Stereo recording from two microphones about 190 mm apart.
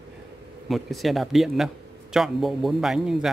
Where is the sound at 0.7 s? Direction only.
Centre (ahead or behind).